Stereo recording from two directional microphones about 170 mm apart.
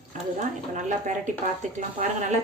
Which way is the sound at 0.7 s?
45° right (ahead or behind).